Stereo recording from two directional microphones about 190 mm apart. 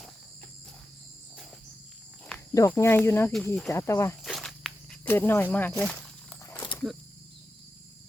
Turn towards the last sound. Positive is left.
turn(degrees=15)  # may be behind; listen again after turning